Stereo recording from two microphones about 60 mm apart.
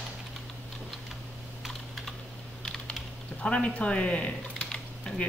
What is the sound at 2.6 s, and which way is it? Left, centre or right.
Typing, centre.